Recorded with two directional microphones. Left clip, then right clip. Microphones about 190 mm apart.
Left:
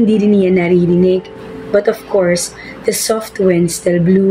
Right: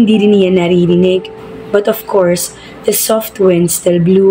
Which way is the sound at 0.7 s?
35° right (ahead or behind).